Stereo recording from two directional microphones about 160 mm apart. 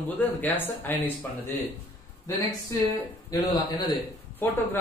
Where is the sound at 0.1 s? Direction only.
10° left (ahead or behind).